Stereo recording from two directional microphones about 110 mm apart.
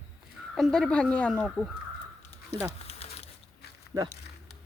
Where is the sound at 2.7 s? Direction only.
70° left (ahead or behind).